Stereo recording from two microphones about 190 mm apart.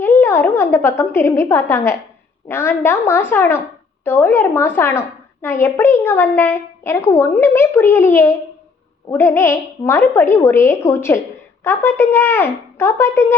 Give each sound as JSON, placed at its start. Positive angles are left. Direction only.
{"t": 0.0, "sound": "a woman's voice", "side_deg": 10}